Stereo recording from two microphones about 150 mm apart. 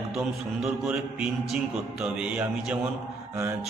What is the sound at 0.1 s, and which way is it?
Mantra, 5° right (ahead or behind).